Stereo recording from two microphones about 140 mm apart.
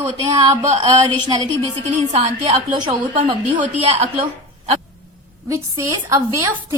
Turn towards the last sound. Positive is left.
turn(degrees=-20)  # may be behind; listen again after turning